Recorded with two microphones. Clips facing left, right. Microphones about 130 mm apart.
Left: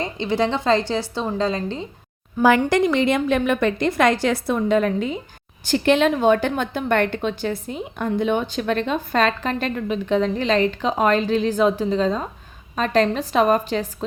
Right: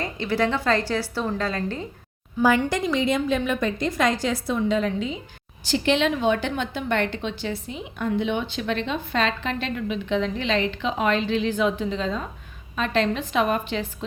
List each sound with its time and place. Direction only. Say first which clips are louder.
0.0 s a woman's voice: left 2 dB; 25° left (ahead or behind)
2.6 s a woman's voice: left 5 dB; 65° left (ahead or behind); by 13.8 s 40° left (ahead or behind)